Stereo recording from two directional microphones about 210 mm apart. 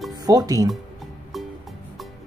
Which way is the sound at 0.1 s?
20° right (ahead or behind).